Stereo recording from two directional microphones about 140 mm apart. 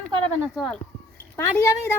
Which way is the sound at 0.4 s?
Centre (ahead or behind).